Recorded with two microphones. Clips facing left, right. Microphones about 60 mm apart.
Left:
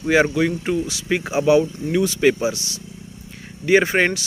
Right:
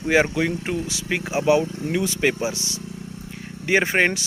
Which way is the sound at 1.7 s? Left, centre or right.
Right.